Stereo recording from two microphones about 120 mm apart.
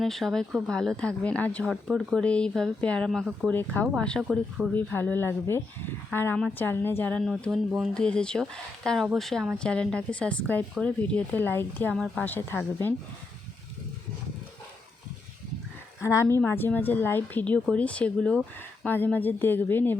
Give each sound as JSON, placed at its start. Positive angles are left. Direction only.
{"t": 0.0, "sound": "speech", "side_deg": 0}
{"t": 1.7, "sound": "speech", "side_deg": -5}
{"t": 2.2, "sound": "speech", "side_deg": 10}
{"t": 2.5, "sound": "speech", "side_deg": 0}
{"t": 2.8, "sound": "speech", "side_deg": 10}
{"t": 4.7, "sound": "speech", "side_deg": 15}
{"t": 7.2, "sound": "speech", "side_deg": 0}
{"t": 11.9, "sound": "speech", "side_deg": 0}
{"t": 12.2, "sound": "speech", "side_deg": 15}
{"t": 16.0, "sound": "speech", "side_deg": 20}